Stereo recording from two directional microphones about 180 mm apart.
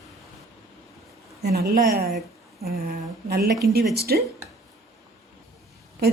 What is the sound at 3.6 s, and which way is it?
Speech, 60° right (ahead or behind).